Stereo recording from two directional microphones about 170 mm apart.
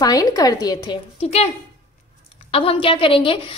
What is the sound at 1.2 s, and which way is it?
Speech, 40° left (ahead or behind).